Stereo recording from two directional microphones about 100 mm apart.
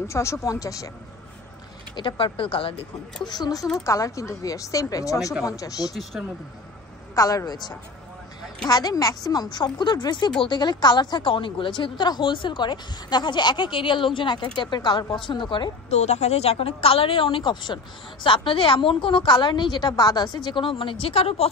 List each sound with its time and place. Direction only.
0.1 s a woman's voice: 30° left (ahead or behind)
2.0 s a woman's voice: 55° left (ahead or behind)
3.3 s a woman's voice: 45° left (ahead or behind)
3.8 s a woman's voice: 30° left (ahead or behind)
7.2 s a woman's voice: 35° left (ahead or behind)
15.9 s a woman's voice: 90° left